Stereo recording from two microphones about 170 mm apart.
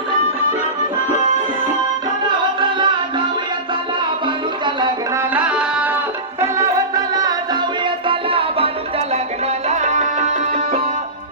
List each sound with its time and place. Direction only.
2.6 s music: 30° right (ahead or behind)
5.1 s tabla: 10° right (ahead or behind)
6.4 s music: 20° right (ahead or behind); by 10.8 s 40° right (ahead or behind)